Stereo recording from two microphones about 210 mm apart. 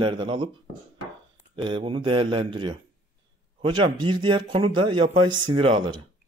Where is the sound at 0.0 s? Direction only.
25° right (ahead or behind).